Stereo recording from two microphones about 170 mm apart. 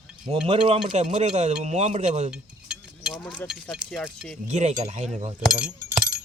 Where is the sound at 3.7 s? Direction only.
Centre (ahead or behind).